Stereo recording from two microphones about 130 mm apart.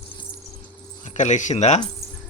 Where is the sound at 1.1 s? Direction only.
70° left (ahead or behind).